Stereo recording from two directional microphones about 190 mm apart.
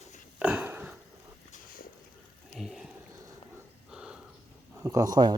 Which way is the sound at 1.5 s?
45° left (ahead or behind).